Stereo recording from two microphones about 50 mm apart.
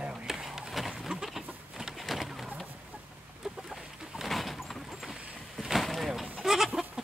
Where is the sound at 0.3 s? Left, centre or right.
Centre.